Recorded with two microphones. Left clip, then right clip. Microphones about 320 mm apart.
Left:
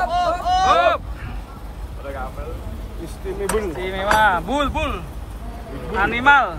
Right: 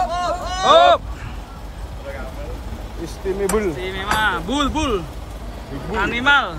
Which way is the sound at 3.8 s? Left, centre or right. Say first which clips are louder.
Left 3 dB; centre.